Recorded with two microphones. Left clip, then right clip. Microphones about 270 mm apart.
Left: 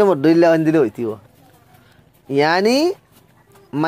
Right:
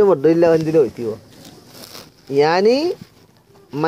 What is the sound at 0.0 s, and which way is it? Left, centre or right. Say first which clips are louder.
A man's voice: even; left.